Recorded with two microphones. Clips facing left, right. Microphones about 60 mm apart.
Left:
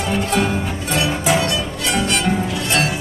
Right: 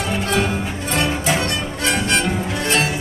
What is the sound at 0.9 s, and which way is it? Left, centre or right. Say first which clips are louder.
Music: left 2 dB; right.